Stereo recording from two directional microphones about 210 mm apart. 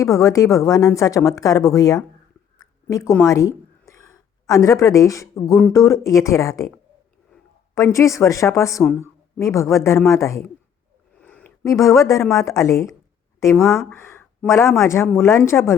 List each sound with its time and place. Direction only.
0.0 s a woman's voice: 15° left (ahead or behind)
7.8 s speech: 15° left (ahead or behind)